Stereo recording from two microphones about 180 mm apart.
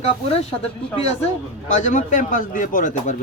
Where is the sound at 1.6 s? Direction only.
45° left (ahead or behind).